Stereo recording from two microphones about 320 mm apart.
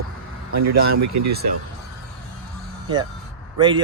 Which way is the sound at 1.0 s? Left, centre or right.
Right.